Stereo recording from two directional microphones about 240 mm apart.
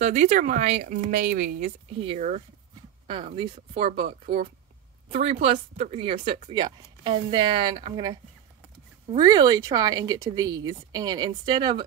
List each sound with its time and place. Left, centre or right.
0.0 s speech: right